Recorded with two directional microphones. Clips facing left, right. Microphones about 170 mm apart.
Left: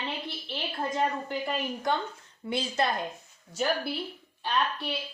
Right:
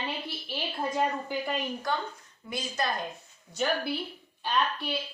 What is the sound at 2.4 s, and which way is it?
Speech, 30° left (ahead or behind).